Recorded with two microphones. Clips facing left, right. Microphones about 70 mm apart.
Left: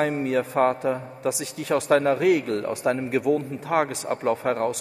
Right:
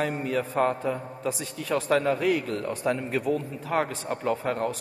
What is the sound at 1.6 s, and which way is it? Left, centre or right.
Speech, left.